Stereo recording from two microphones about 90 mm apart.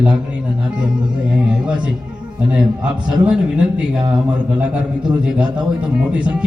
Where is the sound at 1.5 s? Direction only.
10° right (ahead or behind).